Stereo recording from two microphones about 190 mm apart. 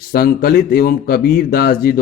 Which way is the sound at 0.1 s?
55° left (ahead or behind).